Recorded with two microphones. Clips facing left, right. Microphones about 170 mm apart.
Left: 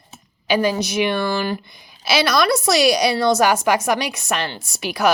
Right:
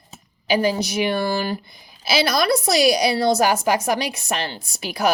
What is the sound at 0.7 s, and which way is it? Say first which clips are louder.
Speech: left 1 dB; 35° right (ahead or behind).